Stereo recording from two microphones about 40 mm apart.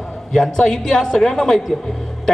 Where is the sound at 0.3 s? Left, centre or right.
Centre.